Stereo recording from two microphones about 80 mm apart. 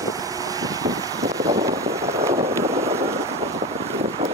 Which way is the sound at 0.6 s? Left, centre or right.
Right.